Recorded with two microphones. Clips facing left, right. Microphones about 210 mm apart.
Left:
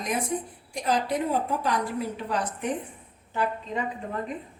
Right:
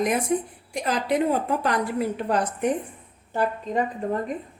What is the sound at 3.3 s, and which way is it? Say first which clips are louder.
Speech: right 4 dB; 45° right (ahead or behind).